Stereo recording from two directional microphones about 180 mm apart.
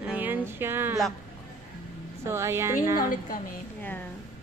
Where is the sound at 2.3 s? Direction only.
15° right (ahead or behind).